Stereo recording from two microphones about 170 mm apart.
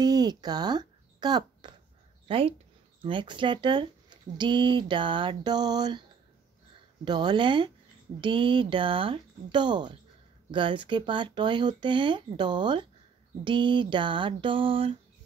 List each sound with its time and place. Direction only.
0.0 s speech: 25° right (ahead or behind)
7.1 s speech: 25° right (ahead or behind)